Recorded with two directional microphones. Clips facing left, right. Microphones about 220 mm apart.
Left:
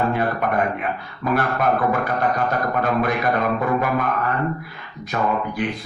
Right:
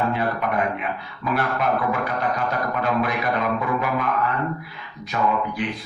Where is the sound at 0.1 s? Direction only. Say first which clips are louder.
Left 2 dB; 50° left (ahead or behind).